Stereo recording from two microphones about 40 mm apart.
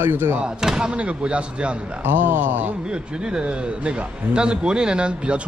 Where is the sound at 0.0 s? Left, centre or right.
Right.